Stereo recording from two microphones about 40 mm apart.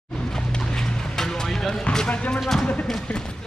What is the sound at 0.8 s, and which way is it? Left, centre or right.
Music, centre.